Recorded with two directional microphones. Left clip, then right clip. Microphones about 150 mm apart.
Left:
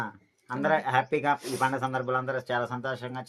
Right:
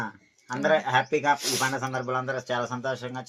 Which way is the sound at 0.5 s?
25° left (ahead or behind).